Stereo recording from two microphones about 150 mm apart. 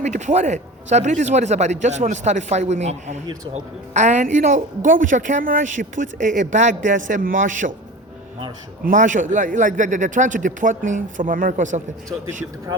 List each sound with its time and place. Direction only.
0.0 s a man's voice: 50° right (ahead or behind)
8.8 s a woman's voice: 60° right (ahead or behind)